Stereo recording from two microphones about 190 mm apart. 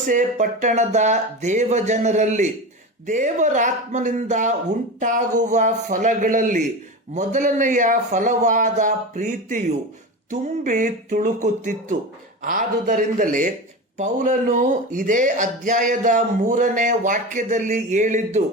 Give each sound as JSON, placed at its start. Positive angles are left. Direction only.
{"t": 0.0, "sound": "speech", "side_deg": -40}